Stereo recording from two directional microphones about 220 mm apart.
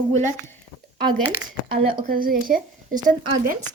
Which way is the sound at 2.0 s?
40° right (ahead or behind).